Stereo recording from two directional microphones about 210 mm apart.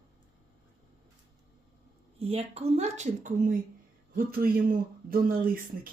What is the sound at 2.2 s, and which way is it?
Speech, 30° right (ahead or behind).